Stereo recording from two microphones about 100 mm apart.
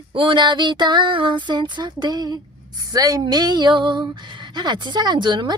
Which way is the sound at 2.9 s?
35° right (ahead or behind).